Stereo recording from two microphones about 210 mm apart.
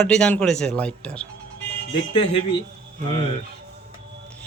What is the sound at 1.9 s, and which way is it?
Speech, 25° left (ahead or behind).